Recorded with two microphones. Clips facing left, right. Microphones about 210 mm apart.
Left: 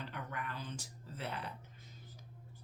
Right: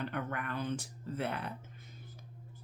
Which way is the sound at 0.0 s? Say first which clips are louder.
Right 7 dB; 60° right (ahead or behind).